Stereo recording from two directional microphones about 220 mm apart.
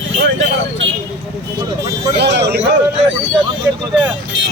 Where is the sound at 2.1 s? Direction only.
50° right (ahead or behind).